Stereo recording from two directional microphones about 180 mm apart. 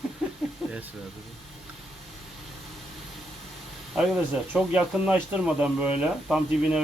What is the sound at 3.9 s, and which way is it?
Speech, 5° right (ahead or behind).